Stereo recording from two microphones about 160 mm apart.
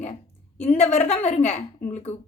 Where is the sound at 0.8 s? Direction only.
45° left (ahead or behind).